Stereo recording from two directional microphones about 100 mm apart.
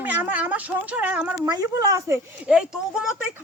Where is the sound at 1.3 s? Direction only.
35° right (ahead or behind).